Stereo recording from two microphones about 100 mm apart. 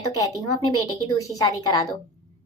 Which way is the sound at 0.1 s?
40° left (ahead or behind).